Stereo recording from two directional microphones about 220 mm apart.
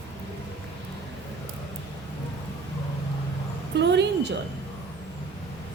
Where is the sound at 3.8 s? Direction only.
50° right (ahead or behind).